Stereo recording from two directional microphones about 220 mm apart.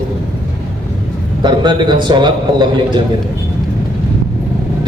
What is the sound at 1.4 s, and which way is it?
A man's voice, 20° right (ahead or behind).